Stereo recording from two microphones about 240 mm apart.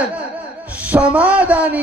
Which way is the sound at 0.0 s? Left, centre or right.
Centre.